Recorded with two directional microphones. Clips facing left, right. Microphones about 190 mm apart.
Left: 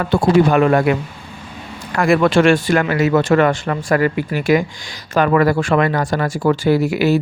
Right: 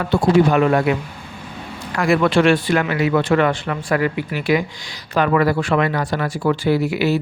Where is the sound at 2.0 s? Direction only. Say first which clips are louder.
Left 2 dB; 50° left (ahead or behind).